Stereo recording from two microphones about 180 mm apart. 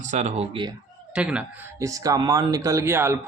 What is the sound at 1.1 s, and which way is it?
Speech, 5° right (ahead or behind).